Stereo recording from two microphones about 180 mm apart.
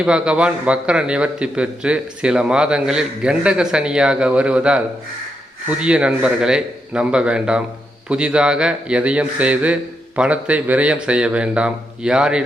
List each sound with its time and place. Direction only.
0.0 s a man's voice: 5° right (ahead or behind)
5.8 s a man's voice: 5° right (ahead or behind)